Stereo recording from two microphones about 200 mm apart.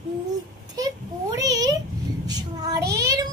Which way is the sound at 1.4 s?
15° right (ahead or behind).